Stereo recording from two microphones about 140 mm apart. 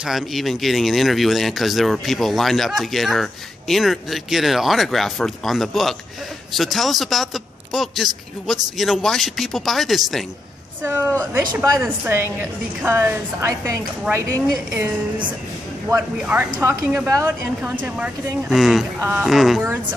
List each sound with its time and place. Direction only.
0.0 s speech: centre (ahead or behind)
10.8 s a woman's voice: 15° right (ahead or behind)
16.2 s a woman's voice: 10° right (ahead or behind)
18.9 s a woman's voice: 15° right (ahead or behind)
19.2 s speech: centre (ahead or behind)